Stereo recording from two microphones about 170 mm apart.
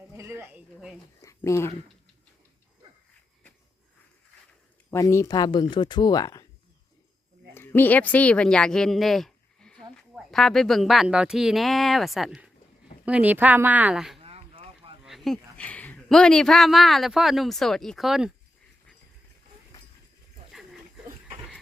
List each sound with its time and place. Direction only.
0.2 s a sound: 15° right (ahead or behind)
1.2 s a sound: 20° left (ahead or behind)
4.9 s speech: 15° left (ahead or behind)
7.5 s a woman's voice: 10° left (ahead or behind); by 14.2 s 5° right (ahead or behind)
14.2 s boat: 35° right (ahead or behind)
15.0 s speech: centre (ahead or behind)